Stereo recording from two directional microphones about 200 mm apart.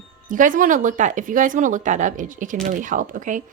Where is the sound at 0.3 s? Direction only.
40° right (ahead or behind).